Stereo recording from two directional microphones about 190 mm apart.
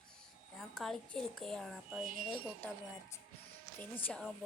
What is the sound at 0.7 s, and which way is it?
Speech, centre (ahead or behind).